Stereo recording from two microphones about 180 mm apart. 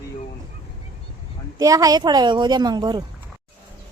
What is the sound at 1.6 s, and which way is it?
A woman's voice, 20° right (ahead or behind).